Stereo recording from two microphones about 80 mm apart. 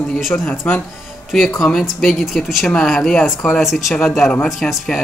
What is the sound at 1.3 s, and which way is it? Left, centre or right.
Speech, centre.